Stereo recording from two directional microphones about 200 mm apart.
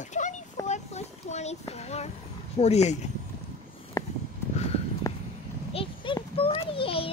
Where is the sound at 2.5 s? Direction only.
35° left (ahead or behind).